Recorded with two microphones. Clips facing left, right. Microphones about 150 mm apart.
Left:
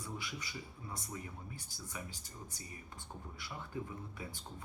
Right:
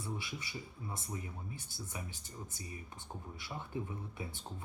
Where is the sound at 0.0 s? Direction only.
25° right (ahead or behind).